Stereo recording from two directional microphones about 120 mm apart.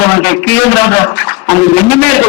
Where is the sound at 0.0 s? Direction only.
20° left (ahead or behind).